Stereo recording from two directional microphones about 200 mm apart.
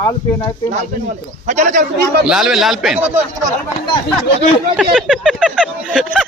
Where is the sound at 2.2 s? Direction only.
Centre (ahead or behind).